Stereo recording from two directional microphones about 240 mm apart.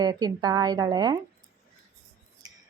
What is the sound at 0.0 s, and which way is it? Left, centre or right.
A woman's voice, centre.